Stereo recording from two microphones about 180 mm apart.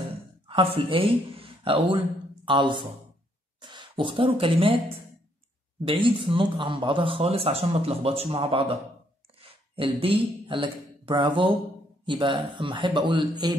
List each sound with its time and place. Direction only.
0.5 s speech: 30° right (ahead or behind)